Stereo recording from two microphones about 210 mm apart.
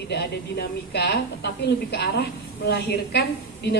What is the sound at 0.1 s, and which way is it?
Speech, 50° left (ahead or behind).